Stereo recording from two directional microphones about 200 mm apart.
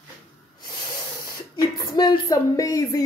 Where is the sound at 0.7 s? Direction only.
20° left (ahead or behind).